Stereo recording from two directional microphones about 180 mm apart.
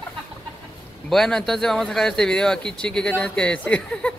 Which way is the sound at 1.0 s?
Centre (ahead or behind).